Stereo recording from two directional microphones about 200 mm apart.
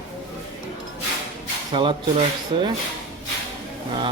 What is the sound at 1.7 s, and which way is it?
Speech, 25° right (ahead or behind).